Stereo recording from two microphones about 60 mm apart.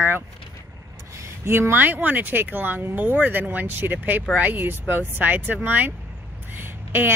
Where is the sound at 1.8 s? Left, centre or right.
Right.